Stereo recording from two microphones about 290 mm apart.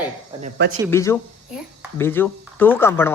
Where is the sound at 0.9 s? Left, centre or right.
Centre.